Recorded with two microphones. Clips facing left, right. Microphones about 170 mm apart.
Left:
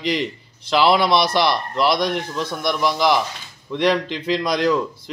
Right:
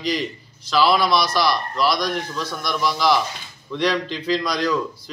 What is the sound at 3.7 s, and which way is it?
Speech, 55° left (ahead or behind).